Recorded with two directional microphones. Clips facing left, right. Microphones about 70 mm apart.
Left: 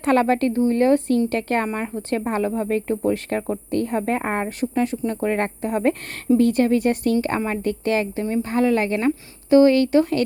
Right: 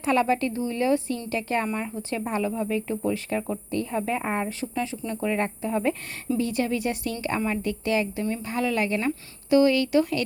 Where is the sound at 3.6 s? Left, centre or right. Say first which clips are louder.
Left 7 dB; left.